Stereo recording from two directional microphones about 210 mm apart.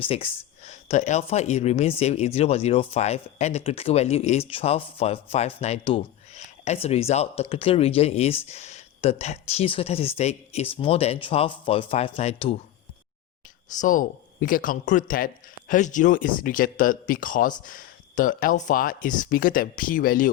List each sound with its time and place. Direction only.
0.0 s speech: 25° left (ahead or behind)
13.7 s speech: 40° left (ahead or behind)